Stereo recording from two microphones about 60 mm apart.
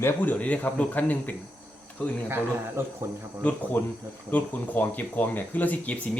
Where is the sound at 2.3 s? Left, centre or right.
Right.